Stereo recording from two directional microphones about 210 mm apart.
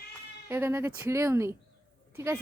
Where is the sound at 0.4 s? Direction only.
10° right (ahead or behind).